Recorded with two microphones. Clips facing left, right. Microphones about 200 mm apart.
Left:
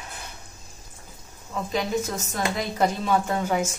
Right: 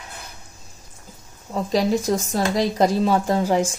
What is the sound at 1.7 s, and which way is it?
Speech, 35° right (ahead or behind).